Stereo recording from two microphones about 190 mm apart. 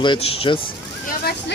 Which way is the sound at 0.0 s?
30° left (ahead or behind).